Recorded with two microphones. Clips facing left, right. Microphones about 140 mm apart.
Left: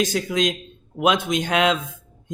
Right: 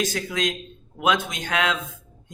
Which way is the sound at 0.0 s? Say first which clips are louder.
Left 4 dB; 20° left (ahead or behind).